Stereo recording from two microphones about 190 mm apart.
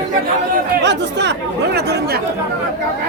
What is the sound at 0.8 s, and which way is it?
Speech, 65° right (ahead or behind).